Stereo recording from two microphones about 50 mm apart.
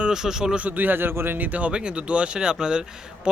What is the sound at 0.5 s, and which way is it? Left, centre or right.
Speech, right.